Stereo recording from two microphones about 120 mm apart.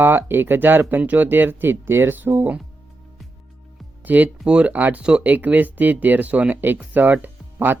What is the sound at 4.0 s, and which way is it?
Speech, 15° right (ahead or behind).